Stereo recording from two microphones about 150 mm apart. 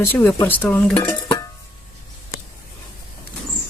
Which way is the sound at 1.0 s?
20° left (ahead or behind).